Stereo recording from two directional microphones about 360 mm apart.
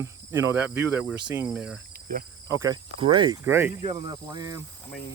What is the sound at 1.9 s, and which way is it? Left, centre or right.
Insect, right.